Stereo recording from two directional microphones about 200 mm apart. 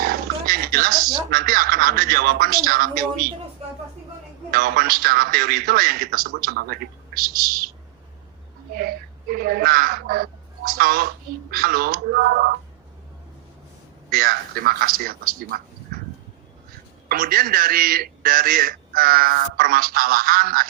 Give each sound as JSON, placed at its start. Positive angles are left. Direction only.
{"t": 0.0, "sound": "a sound", "side_deg": -45}
{"t": 1.3, "sound": "a man's voice", "side_deg": -45}
{"t": 4.5, "sound": "a man's voice", "side_deg": -45}
{"t": 9.3, "sound": "a man's voice", "side_deg": -45}
{"t": 14.1, "sound": "a man's voice", "side_deg": -45}
{"t": 17.1, "sound": "a man's voice", "side_deg": -45}